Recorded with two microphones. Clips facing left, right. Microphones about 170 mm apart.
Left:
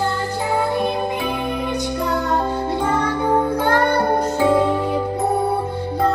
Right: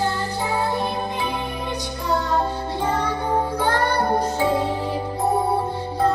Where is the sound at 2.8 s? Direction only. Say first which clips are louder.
Left 1 dB; 55° left (ahead or behind).